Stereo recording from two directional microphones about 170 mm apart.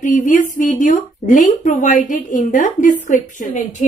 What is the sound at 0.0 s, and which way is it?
A woman's voice, 45° left (ahead or behind).